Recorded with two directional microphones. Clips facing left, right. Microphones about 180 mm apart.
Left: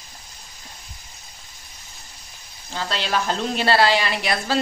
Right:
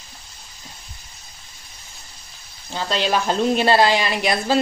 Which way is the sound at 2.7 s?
15° right (ahead or behind).